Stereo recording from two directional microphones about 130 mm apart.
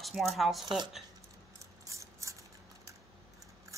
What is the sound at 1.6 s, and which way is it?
Ratchet, 25° right (ahead or behind).